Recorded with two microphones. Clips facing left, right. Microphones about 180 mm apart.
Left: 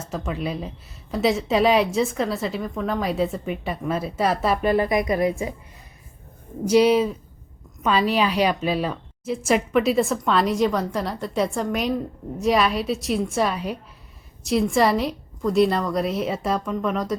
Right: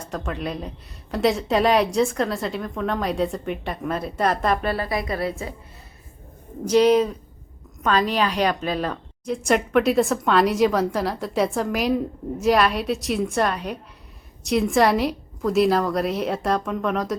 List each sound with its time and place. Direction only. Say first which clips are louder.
0.0 s a woman's voice: left 1 dB; 5° left (ahead or behind)
4.7 s a woman's voice: left 5 dB; 20° left (ahead or behind)
6.7 s a woman's voice: even; 10° left (ahead or behind)